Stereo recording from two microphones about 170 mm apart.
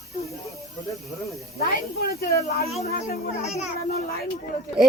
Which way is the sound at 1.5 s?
65° left (ahead or behind).